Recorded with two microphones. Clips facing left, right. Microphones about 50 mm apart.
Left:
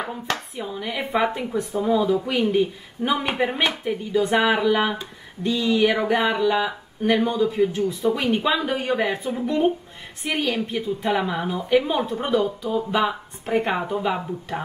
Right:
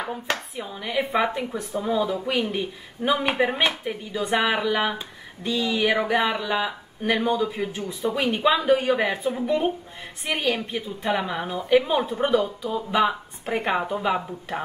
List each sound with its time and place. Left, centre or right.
0.3 s speech: centre